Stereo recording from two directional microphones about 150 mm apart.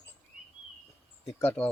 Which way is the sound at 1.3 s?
10° left (ahead or behind).